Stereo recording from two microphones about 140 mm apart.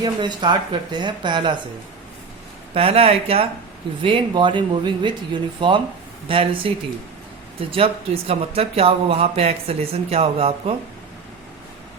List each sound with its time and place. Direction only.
0.0 s speech: 30° right (ahead or behind)
2.7 s speech: 45° right (ahead or behind)
7.7 s speech: 45° right (ahead or behind)